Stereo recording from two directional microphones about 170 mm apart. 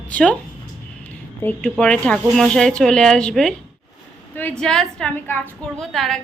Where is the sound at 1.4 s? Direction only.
5° left (ahead or behind).